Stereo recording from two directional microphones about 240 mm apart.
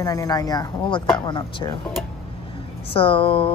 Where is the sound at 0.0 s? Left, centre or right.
Centre.